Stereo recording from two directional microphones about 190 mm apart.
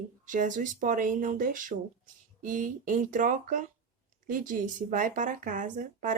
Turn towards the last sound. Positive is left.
turn(degrees=-45)  # may be behind; listen again after turning